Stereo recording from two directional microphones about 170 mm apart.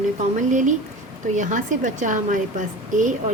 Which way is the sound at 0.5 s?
45° right (ahead or behind).